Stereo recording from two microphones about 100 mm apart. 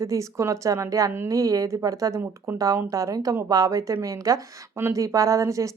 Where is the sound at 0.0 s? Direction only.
30° right (ahead or behind).